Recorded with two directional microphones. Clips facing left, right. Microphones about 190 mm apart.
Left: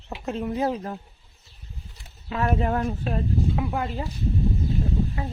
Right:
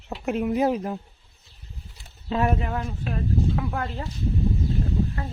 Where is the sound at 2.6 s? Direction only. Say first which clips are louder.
Left 5 dB; 50° left (ahead or behind).